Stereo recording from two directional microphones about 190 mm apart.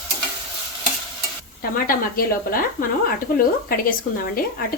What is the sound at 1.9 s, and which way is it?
Speech, 50° left (ahead or behind).